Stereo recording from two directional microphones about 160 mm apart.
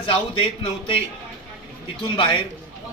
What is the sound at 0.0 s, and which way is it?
A man's voice, 35° left (ahead or behind).